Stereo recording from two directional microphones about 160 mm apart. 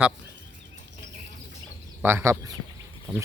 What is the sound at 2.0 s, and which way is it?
Speech, 15° right (ahead or behind).